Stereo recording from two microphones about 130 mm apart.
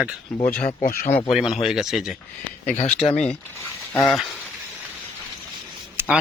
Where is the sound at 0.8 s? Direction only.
90° left.